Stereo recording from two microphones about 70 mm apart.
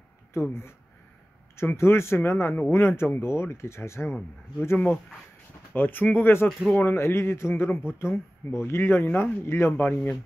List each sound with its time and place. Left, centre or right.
0.3 s speech: left
5.8 s speech: left
8.8 s speech: left